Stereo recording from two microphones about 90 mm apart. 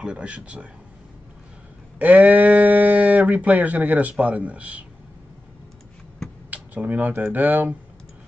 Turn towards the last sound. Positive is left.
turn(degrees=-20)  # may be behind; listen again after turning